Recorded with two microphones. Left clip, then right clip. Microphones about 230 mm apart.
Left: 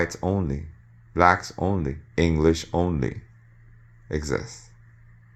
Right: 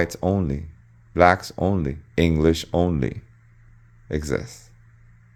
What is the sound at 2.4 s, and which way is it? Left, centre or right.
Speech, right.